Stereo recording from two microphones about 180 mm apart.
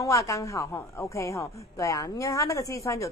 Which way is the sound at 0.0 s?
15° left (ahead or behind).